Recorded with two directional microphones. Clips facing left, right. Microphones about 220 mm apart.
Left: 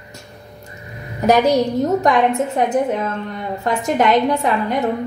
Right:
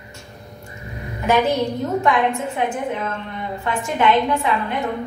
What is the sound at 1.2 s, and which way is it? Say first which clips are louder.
A woman's voice: left 4 dB; 40° left (ahead or behind).